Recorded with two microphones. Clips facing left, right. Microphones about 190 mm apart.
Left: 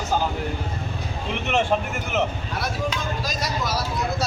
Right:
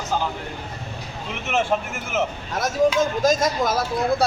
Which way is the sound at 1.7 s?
5° right (ahead or behind).